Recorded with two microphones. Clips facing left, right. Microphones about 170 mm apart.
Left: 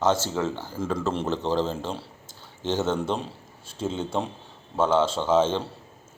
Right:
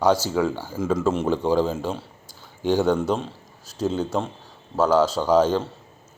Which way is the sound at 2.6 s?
20° left (ahead or behind).